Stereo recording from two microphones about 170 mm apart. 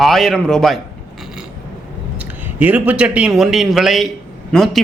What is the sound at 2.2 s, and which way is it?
A man's voice, 10° right (ahead or behind).